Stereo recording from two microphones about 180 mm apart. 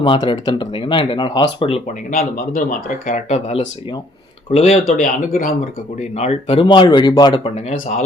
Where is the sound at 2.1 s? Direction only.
50° left (ahead or behind); by 7.5 s 25° left (ahead or behind).